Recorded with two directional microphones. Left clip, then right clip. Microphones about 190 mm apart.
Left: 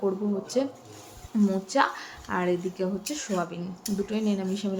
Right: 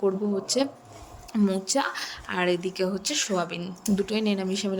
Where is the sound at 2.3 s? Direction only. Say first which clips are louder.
Right 1 dB; 50° right (ahead or behind).